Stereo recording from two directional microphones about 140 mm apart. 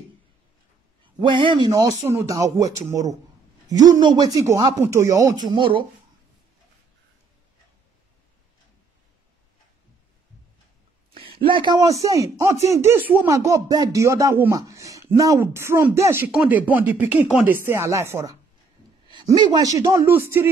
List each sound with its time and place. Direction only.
1.0 s speech: 35° right (ahead or behind)
3.7 s speech: 25° right (ahead or behind)
11.1 s speech: 40° right (ahead or behind); by 18.4 s 20° right (ahead or behind)
19.0 s a sound: 30° right (ahead or behind)
19.4 s speech: 30° right (ahead or behind)